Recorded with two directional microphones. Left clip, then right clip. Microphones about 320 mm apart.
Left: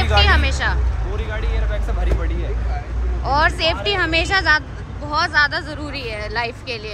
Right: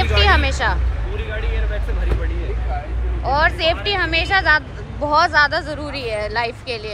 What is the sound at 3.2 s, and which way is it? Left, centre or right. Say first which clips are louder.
Speech: even; centre.